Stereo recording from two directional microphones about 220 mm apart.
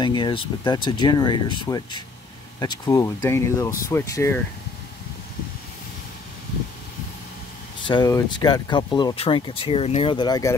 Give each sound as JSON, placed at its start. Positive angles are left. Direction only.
{"t": 0.0, "sound": "speech", "side_deg": 20}
{"t": 7.8, "sound": "speech", "side_deg": 20}